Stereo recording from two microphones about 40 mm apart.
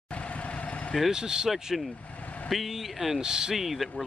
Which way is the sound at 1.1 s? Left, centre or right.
Centre.